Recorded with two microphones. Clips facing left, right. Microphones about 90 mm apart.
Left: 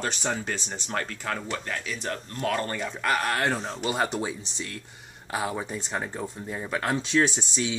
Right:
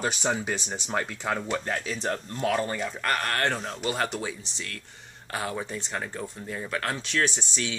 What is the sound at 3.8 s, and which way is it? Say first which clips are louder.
Speech: left 2 dB; 20° left (ahead or behind).